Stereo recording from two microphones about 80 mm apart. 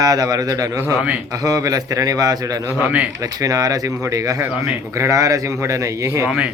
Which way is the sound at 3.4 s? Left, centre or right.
Right.